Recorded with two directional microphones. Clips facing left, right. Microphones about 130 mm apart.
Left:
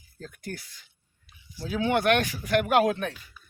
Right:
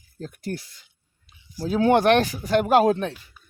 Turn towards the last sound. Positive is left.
turn(degrees=-30)  # may be behind; listen again after turning